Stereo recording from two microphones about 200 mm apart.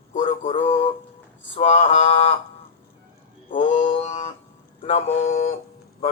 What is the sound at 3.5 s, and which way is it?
Male singing, 40° left (ahead or behind).